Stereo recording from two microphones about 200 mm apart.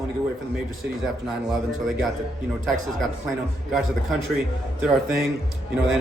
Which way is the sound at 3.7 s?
5° right (ahead or behind).